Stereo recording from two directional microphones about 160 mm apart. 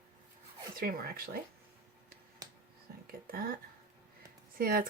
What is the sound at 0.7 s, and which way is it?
Speech, 65° right (ahead or behind).